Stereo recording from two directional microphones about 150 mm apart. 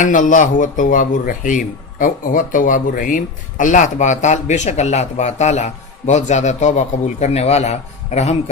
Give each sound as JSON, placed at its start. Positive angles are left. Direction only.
{"t": 0.0, "sound": "a man's voice", "side_deg": 60}